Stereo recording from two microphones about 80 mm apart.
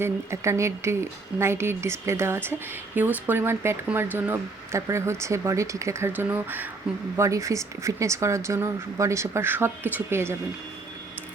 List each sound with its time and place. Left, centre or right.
0.0 s a woman's voice: right
4.9 s a woman's voice: right
6.1 s speech: right
7.2 s a woman's voice: right